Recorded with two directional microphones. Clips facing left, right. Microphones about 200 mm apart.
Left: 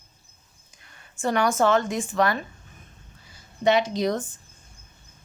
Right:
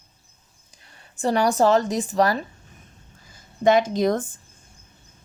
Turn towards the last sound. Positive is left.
turn(degrees=-50)  # may be behind; listen again after turning